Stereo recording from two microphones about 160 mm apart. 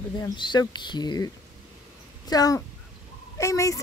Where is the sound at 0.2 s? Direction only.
25° left (ahead or behind).